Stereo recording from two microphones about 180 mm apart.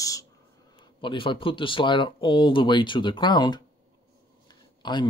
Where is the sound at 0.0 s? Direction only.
20° left (ahead or behind).